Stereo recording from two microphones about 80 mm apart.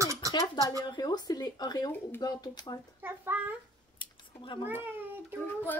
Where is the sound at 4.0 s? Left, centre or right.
Left.